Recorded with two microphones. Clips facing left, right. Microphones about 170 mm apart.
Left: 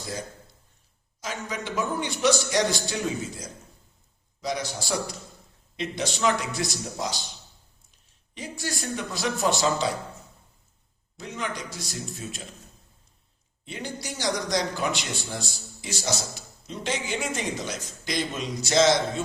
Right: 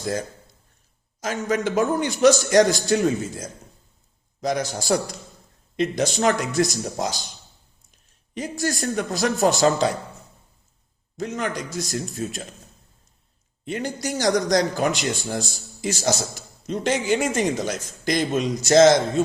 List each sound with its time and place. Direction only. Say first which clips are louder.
1.2 s a man's voice: right 10 dB; 50° right (ahead or behind)
8.4 s a man's voice: right 8 dB; 45° right (ahead or behind)
11.2 s a man's voice: right 6 dB; 45° right (ahead or behind)
13.7 s a man's voice: right 8 dB; 45° right (ahead or behind)